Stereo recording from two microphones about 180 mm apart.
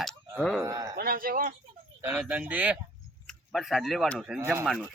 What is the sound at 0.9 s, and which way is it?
Speech, 55° right (ahead or behind).